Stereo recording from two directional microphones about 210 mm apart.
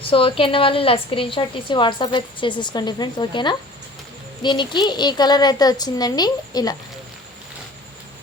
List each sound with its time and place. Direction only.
0.1 s a woman's voice: 25° left (ahead or behind)